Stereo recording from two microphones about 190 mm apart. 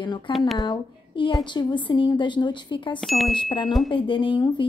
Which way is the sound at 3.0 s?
Centre (ahead or behind).